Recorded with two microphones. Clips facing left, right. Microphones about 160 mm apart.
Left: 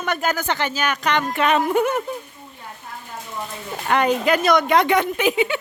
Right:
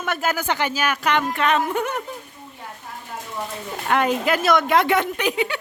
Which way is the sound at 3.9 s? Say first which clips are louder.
Left 2 dB; centre (ahead or behind).